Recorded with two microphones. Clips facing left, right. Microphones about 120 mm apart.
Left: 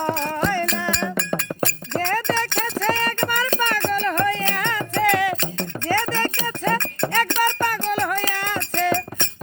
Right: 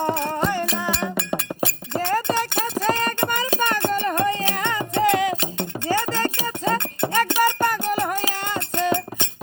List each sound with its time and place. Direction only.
0.0 s music: 10° right (ahead or behind)
1.1 s chink: 5° right (ahead or behind)
5.5 s a sound: 10° right (ahead or behind)